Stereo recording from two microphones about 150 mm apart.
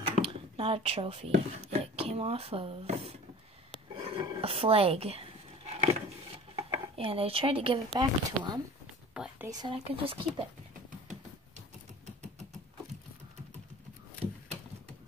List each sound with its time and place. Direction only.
0.2 s speech: 35° right (ahead or behind)
5.7 s a sound: 45° right (ahead or behind)
6.5 s speech: 40° right (ahead or behind)
9.1 s speech: 5° right (ahead or behind)
9.5 s speech: 25° right (ahead or behind)